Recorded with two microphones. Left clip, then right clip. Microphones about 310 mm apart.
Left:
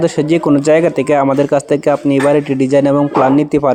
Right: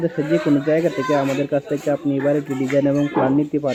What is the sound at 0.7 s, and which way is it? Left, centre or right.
Speech, centre.